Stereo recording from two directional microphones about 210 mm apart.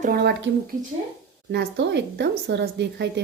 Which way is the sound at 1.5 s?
55° right (ahead or behind).